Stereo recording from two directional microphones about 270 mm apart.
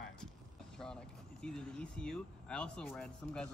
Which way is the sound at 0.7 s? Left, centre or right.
Centre.